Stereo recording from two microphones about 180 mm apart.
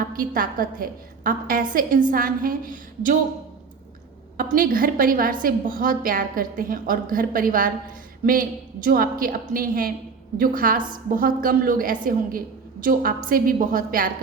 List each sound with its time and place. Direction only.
0.0 s a woman's voice: 50° right (ahead or behind)
4.4 s a woman's voice: 50° right (ahead or behind)